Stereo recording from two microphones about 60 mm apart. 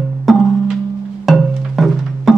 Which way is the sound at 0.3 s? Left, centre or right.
Centre.